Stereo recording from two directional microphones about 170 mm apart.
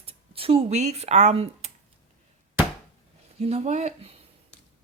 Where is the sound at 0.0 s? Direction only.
35° right (ahead or behind).